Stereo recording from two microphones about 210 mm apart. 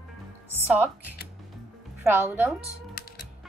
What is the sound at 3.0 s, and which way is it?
Music, 45° left (ahead or behind).